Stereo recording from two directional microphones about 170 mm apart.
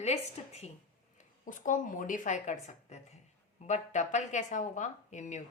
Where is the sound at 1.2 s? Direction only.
50° left (ahead or behind).